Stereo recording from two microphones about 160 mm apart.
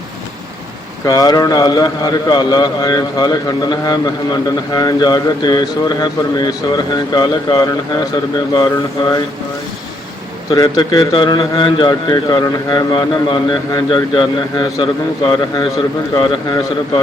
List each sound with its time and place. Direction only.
1.0 s speech: 25° left (ahead or behind)
10.5 s speech: 25° left (ahead or behind)